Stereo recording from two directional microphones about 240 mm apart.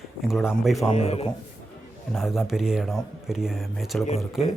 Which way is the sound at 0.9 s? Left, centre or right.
Left.